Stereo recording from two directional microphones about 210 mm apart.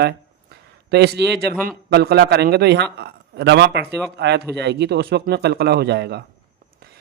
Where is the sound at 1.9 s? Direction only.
50° right (ahead or behind).